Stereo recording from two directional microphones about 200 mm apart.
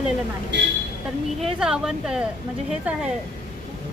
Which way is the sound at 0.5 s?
60° right (ahead or behind).